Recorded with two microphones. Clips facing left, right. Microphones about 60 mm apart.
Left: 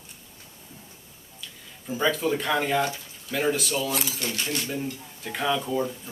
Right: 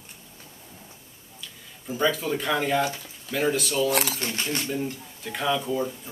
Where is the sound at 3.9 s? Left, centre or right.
Right.